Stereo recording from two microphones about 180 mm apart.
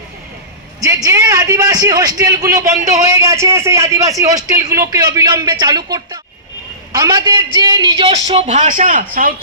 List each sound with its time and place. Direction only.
0.8 s a man's voice: 20° right (ahead or behind); by 9.3 s 50° right (ahead or behind)